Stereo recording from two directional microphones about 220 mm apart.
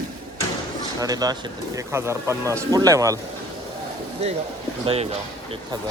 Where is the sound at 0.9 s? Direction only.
15° right (ahead or behind).